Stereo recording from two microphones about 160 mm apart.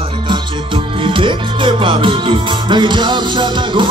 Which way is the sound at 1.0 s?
30° right (ahead or behind).